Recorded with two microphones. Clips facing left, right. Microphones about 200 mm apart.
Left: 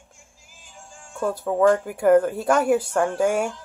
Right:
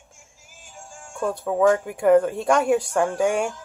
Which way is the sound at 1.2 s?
Centre (ahead or behind).